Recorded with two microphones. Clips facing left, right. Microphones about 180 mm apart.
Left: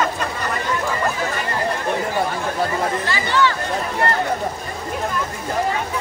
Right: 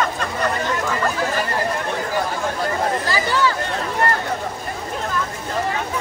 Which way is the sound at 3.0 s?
40° right (ahead or behind).